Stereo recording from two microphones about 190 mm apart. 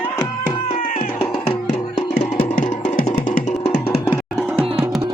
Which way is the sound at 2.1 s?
40° left (ahead or behind).